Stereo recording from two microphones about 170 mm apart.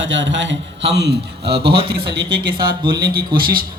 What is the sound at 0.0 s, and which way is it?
A man's voice, 90° right.